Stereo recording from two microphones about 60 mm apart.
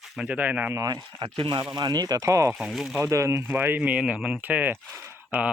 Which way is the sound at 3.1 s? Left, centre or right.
Right.